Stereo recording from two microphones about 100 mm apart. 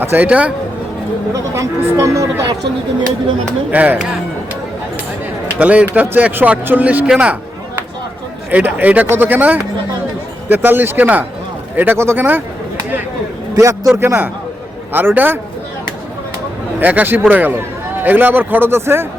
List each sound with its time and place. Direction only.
0.0 s speech: 20° right (ahead or behind)
1.3 s speech: 30° right (ahead or behind)
3.7 s speech: 15° right (ahead or behind)
5.5 s speech: 15° right (ahead or behind)
8.4 s speech: 15° right (ahead or behind)
13.5 s a man's voice: 35° right (ahead or behind)
16.8 s speech: 15° right (ahead or behind)